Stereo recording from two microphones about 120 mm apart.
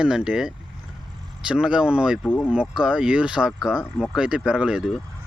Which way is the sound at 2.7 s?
5° right (ahead or behind).